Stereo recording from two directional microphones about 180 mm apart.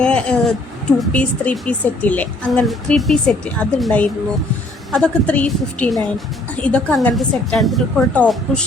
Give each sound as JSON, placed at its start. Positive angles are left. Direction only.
{"t": 0.0, "sound": "a woman's voice", "side_deg": 5}